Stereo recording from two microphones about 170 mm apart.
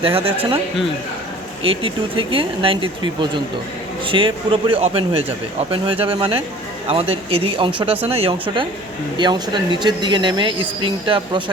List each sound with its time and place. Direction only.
0.0 s speech: 35° right (ahead or behind)
1.6 s speech: 35° right (ahead or behind)